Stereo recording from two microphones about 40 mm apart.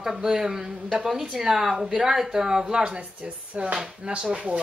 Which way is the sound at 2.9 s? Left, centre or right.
Right.